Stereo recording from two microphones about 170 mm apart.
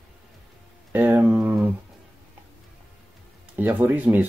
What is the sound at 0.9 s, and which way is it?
Speech, 10° right (ahead or behind).